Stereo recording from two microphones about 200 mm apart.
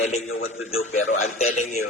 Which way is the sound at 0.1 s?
35° left (ahead or behind).